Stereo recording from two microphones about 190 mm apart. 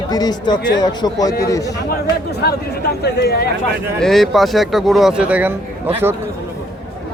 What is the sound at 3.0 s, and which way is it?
Speech, 55° left (ahead or behind).